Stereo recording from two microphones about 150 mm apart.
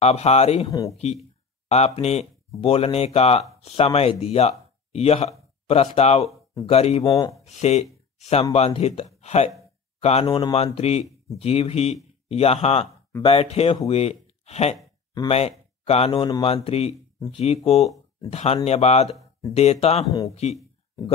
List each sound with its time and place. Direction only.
0.0 s speech: 45° left (ahead or behind)
0.7 s speech: 20° left (ahead or behind)
0.9 s speech: 45° left (ahead or behind)
7.1 s speech: 25° left (ahead or behind)
7.4 s speech: 50° left (ahead or behind)
10.2 s speech: 30° left (ahead or behind)
10.5 s speech: 45° left (ahead or behind)